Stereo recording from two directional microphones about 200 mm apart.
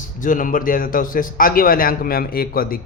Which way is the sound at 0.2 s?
40° left (ahead or behind).